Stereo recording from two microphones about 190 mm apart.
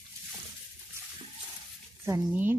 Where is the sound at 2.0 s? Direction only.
10° right (ahead or behind).